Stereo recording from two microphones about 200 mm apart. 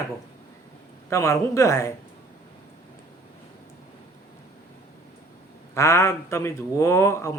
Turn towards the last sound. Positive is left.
turn(degrees=15)  # may be behind; listen again after turning